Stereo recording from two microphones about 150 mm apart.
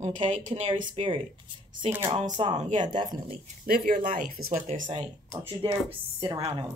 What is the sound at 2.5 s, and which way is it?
Speech, 55° right (ahead or behind).